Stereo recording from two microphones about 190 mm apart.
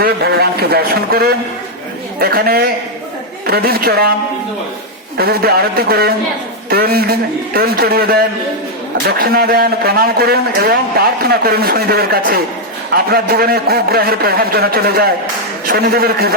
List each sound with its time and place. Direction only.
0.0 s a man's voice: 55° right (ahead or behind)
5.1 s a man's voice: 55° right (ahead or behind)